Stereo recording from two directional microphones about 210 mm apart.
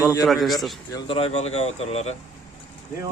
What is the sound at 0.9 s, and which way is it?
Speech, 20° left (ahead or behind).